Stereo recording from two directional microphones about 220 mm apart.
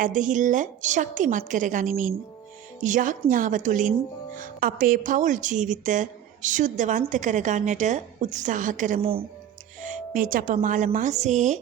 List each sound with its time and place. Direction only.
0.0 s a woman's voice: 35° right (ahead or behind)